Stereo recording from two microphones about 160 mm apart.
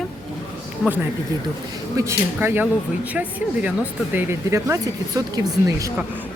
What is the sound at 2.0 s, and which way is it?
Speech, 15° right (ahead or behind).